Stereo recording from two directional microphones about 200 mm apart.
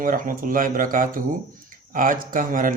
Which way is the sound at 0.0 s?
45° right (ahead or behind).